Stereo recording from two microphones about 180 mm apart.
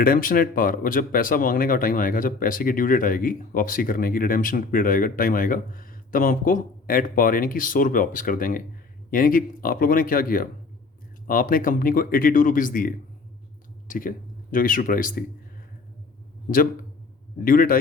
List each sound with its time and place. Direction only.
0.0 s speech: 50° left (ahead or behind)
17.4 s speech: 50° left (ahead or behind)